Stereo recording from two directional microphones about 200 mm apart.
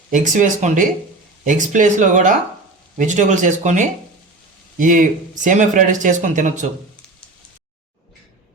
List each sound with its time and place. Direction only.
0.1 s speech: 40° right (ahead or behind)